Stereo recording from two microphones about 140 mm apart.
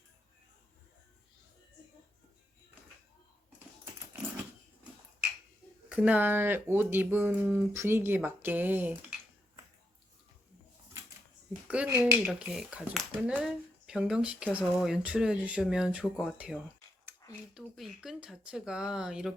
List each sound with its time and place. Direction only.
5.9 s speech: 10° right (ahead or behind)
11.9 s speech: 15° right (ahead or behind)
12.2 s speech: 5° right (ahead or behind)
17.6 s speech: centre (ahead or behind)